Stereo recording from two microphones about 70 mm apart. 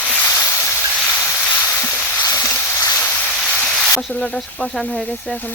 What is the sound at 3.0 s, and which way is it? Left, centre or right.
Boat, left.